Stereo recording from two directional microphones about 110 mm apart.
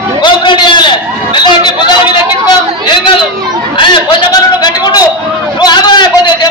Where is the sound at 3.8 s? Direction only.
45° left (ahead or behind).